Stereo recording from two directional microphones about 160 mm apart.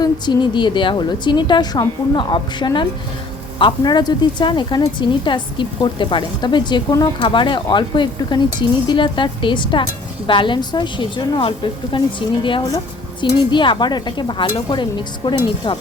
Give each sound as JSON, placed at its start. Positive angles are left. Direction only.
{"t": 0.0, "sound": "a woman's voice", "side_deg": 30}